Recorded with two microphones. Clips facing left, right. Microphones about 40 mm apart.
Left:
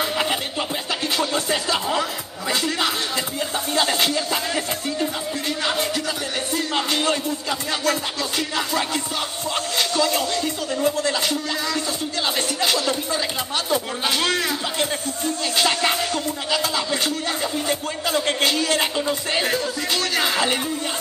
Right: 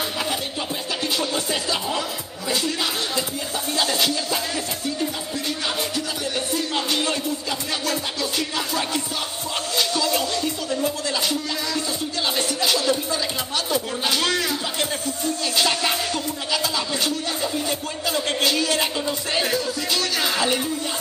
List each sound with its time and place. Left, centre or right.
0.0 s music: left
6.5 s music: left
12.2 s a sound: left
15.4 s music: left
16.1 s a sound: left
18.9 s music: centre
19.4 s music: left
20.2 s music: left